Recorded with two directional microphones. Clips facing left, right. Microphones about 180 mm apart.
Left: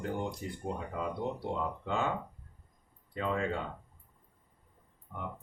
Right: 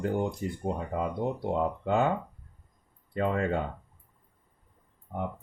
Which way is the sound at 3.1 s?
50° right (ahead or behind).